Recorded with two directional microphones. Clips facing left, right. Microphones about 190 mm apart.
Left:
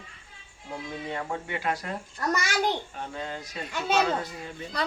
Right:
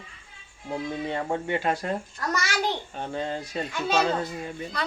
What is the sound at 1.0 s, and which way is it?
A child's voice, 30° right (ahead or behind).